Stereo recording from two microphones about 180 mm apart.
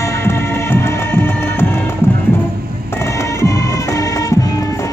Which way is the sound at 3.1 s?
15° left (ahead or behind).